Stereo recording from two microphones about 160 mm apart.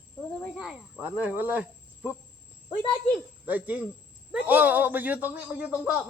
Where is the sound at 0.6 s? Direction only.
5° right (ahead or behind).